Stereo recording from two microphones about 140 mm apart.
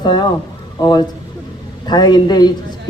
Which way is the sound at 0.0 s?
30° left (ahead or behind).